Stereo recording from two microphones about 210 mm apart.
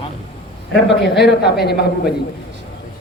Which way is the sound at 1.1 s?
50° left (ahead or behind).